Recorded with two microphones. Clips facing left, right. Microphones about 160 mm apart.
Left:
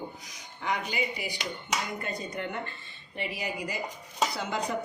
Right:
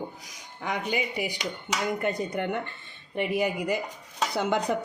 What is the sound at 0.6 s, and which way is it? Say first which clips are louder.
Speech: right 2 dB; 55° right (ahead or behind).